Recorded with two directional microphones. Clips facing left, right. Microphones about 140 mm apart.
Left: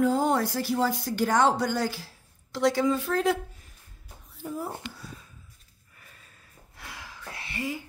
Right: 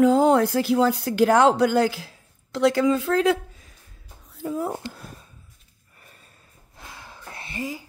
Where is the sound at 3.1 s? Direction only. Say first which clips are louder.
Right 6 dB; 75° right (ahead or behind).